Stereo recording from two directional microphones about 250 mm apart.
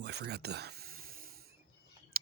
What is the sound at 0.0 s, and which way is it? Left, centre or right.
Speech, right.